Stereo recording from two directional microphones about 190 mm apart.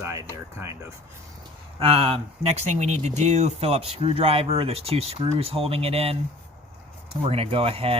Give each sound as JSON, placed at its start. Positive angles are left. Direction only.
{"t": 0.0, "sound": "speech", "side_deg": -15}
{"t": 1.8, "sound": "speech", "side_deg": -30}
{"t": 7.2, "sound": "speech", "side_deg": -30}